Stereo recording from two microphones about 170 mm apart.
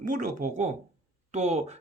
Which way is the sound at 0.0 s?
50° right (ahead or behind).